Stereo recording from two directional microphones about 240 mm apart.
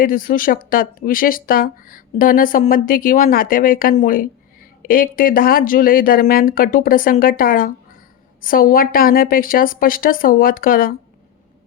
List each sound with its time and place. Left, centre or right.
0.0 s speech: left